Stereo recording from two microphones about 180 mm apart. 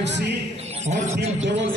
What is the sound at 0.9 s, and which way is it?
Speech, 40° right (ahead or behind).